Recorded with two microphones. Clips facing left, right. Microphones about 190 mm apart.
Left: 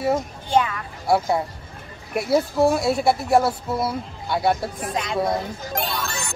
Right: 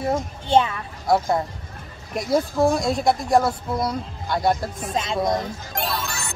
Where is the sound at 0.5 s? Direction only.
25° right (ahead or behind).